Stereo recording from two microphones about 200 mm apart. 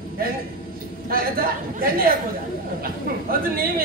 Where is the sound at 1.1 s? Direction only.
45° right (ahead or behind).